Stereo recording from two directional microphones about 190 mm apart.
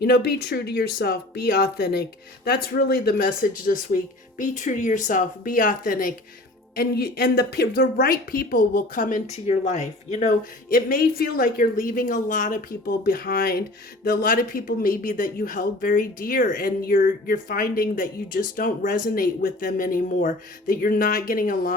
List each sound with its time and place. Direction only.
0.0 s speech: 55° left (ahead or behind)